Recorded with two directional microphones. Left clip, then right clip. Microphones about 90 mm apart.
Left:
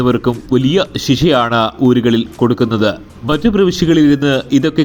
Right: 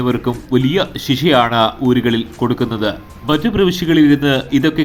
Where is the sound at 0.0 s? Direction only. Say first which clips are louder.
Left 4 dB; 30° left (ahead or behind).